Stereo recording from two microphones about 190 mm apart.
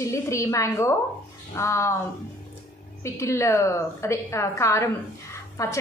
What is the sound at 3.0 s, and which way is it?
A woman's voice, 15° left (ahead or behind).